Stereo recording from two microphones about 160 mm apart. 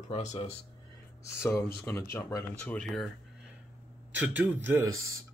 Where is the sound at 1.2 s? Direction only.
15° left (ahead or behind).